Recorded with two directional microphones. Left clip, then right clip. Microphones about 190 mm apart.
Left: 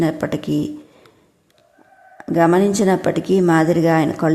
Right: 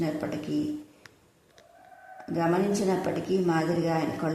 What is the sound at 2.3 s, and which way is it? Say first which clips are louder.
A woman's voice: left 11 dB; 40° left (ahead or behind).